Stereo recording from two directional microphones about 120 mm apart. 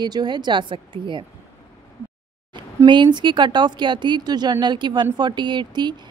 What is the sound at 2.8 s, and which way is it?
A woman's voice, 40° right (ahead or behind).